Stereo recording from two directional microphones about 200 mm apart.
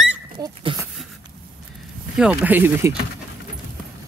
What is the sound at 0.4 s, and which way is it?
Dog, 20° right (ahead or behind).